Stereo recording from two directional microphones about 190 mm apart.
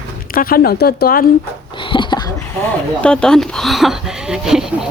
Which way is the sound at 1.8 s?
25° left (ahead or behind).